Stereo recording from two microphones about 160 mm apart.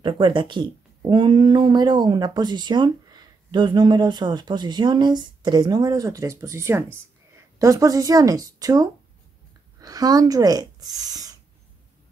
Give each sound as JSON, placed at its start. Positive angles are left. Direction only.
{"t": 0.0, "sound": "speech", "side_deg": -30}